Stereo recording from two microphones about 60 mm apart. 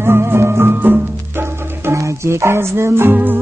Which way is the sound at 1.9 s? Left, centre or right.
Right.